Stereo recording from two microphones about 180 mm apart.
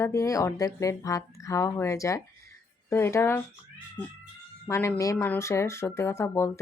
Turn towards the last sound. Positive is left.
turn(degrees=15)  # may be behind; listen again after turning